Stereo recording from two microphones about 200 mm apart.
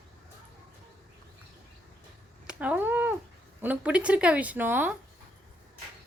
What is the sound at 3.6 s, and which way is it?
A woman's voice, 5° right (ahead or behind).